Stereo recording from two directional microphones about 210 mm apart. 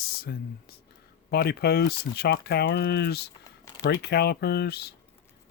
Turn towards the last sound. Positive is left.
turn(degrees=50)  # may be behind; listen again after turning